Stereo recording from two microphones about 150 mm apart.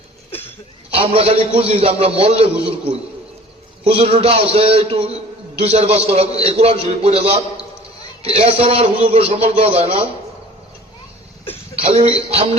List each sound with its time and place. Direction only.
0.9 s a man's voice: 40° right (ahead or behind)
11.8 s a man's voice: 40° right (ahead or behind)